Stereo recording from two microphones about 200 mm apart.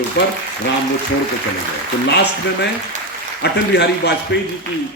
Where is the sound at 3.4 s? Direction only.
55° left (ahead or behind).